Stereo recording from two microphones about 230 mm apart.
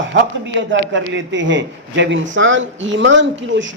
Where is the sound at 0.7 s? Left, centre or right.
Right.